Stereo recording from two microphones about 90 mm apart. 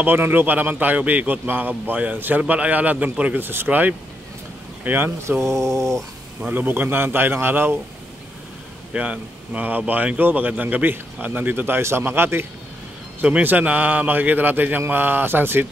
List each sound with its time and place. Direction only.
0.0 s a man's voice: 20° right (ahead or behind)
6.4 s a man's voice: 20° right (ahead or behind)
8.9 s a man's voice: 15° right (ahead or behind)